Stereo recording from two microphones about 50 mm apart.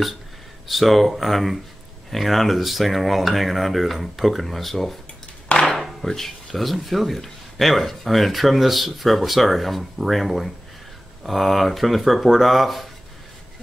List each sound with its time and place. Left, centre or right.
0.7 s speech: centre
5.5 s a sound: left
5.8 s speech: centre